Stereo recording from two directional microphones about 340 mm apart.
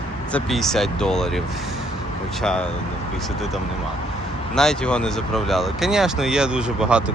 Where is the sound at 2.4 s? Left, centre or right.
Centre.